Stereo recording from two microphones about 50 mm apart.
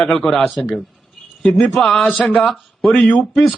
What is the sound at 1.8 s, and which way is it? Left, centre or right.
Speech, centre.